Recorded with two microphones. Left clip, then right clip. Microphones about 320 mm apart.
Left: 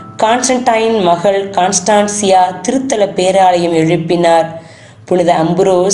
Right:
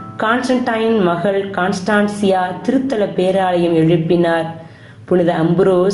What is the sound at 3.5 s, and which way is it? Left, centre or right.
Speech, left.